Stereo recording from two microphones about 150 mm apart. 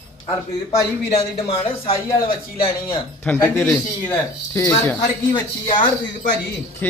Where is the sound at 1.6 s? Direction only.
40° left (ahead or behind).